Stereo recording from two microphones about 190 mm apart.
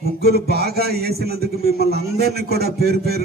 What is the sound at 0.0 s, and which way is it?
A man's voice, 55° right (ahead or behind).